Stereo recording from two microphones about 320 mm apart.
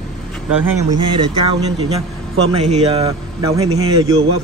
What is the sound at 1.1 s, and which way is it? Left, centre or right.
Speech, centre.